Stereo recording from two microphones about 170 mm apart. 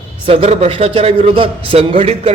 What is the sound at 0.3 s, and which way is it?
A man's voice, 35° right (ahead or behind).